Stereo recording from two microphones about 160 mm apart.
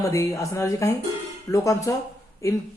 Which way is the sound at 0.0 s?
20° left (ahead or behind).